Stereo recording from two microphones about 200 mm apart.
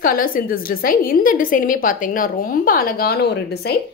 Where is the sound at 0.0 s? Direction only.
45° left (ahead or behind).